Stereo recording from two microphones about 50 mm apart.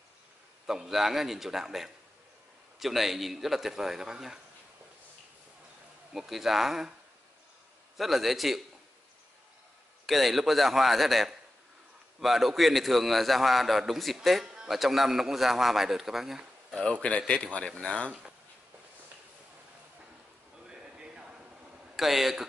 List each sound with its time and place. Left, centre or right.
0.7 s a man's voice: centre
6.1 s a man's voice: centre
8.0 s a man's voice: centre
10.0 s a man's voice: centre
14.4 s a sound: centre
14.7 s a man's voice: centre
16.8 s speech: left
20.6 s a sound: centre
21.9 s speech: centre